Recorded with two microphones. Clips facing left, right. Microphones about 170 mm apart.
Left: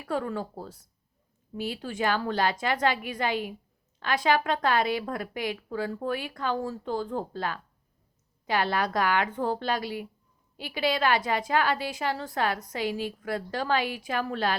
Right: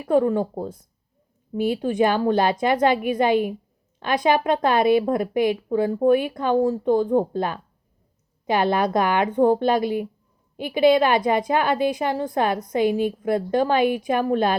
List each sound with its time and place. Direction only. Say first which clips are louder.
0.0 s a woman's voice: right 11 dB; 20° right (ahead or behind)
1.5 s a woman's voice: right 11 dB; 20° right (ahead or behind)